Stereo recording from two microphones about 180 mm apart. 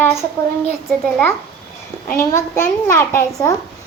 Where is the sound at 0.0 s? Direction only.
15° left (ahead or behind).